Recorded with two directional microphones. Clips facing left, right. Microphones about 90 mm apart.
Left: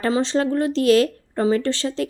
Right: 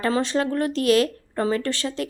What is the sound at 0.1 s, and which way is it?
A woman's voice, 30° left (ahead or behind).